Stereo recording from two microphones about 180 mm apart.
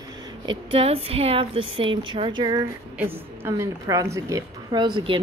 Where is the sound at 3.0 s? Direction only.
15° right (ahead or behind).